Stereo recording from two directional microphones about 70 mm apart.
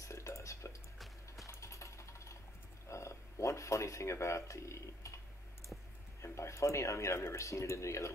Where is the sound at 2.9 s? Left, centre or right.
Left.